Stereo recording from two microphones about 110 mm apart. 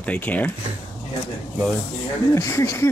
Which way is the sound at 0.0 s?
15° left (ahead or behind).